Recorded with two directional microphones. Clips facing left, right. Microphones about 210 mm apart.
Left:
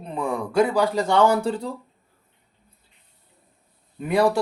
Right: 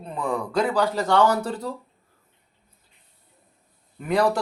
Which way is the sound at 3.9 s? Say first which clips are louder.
Left 1 dB; 10° left (ahead or behind).